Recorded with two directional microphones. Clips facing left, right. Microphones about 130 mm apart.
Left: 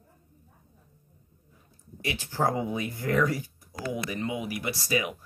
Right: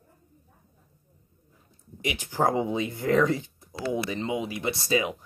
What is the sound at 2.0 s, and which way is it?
Speech, 15° right (ahead or behind).